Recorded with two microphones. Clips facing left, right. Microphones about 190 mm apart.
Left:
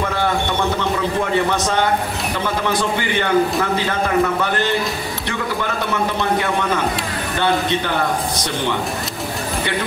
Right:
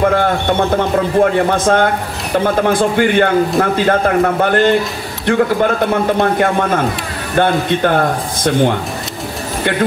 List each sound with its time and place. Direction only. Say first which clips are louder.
0.0 s a man's voice: right 6 dB; 55° right (ahead or behind)